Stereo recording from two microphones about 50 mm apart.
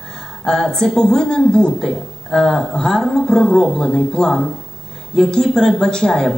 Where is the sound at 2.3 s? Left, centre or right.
Centre.